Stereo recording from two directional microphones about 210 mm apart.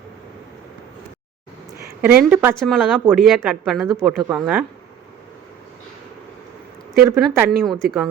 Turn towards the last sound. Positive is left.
turn(degrees=0)  # may be behind; listen again after turning